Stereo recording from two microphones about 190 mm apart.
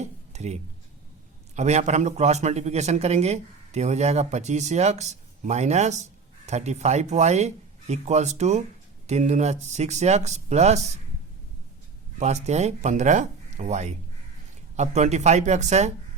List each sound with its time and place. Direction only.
0.3 s speech: 35° right (ahead or behind)
12.2 s speech: 35° right (ahead or behind)